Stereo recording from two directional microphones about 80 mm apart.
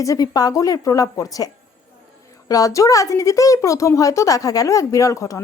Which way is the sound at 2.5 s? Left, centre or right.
Left.